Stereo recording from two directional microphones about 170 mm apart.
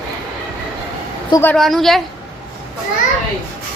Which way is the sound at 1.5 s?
Centre (ahead or behind).